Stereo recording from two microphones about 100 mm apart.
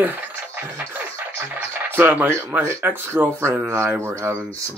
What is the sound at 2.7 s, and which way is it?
Speech, 25° right (ahead or behind).